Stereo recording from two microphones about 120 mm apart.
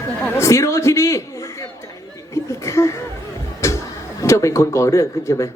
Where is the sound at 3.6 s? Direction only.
25° left (ahead or behind).